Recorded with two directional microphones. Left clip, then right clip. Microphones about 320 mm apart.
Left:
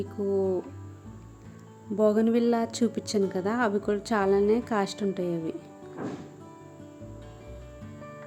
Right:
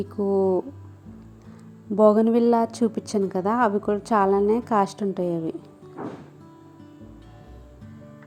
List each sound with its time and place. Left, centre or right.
0.0 s speech: centre
2.0 s a woman's voice: centre